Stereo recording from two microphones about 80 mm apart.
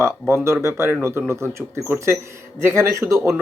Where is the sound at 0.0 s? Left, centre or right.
Right.